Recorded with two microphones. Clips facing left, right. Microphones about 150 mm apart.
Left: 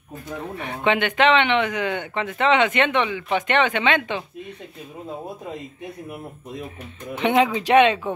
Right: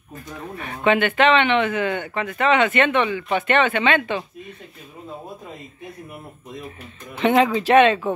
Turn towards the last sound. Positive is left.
turn(degrees=15)  # may be behind; listen again after turning